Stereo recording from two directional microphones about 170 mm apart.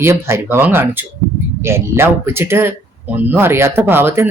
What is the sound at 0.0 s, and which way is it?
Speech, 15° right (ahead or behind).